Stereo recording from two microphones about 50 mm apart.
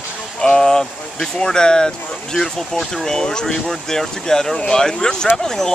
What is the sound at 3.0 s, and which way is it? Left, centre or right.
Speech, centre.